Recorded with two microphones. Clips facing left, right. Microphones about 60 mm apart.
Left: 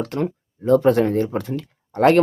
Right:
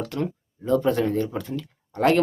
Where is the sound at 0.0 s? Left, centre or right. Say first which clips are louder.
Left 4 dB; left.